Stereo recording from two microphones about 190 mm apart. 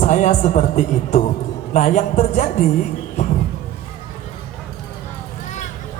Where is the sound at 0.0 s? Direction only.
40° left (ahead or behind).